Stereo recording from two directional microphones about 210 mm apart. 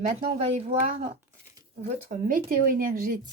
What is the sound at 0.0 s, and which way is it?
Speech, 35° right (ahead or behind).